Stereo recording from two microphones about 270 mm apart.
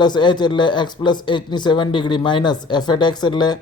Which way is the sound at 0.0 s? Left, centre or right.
Centre.